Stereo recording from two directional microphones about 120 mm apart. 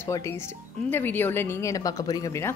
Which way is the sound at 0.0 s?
25° left (ahead or behind).